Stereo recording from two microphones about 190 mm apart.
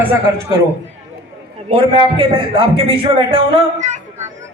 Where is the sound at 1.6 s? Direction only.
30° right (ahead or behind).